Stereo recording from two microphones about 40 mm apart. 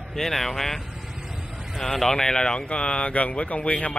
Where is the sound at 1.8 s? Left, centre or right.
Centre.